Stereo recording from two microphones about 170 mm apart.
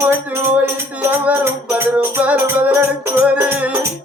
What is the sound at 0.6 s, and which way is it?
Music, 10° right (ahead or behind).